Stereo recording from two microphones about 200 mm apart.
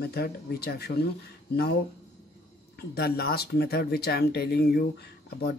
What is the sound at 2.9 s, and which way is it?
Speech, 50° left (ahead or behind).